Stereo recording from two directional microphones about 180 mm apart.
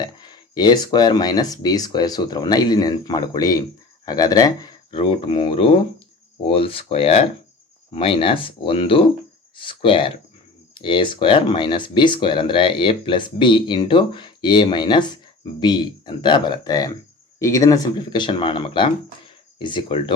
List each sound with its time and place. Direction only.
0.0 s speech: 25° left (ahead or behind)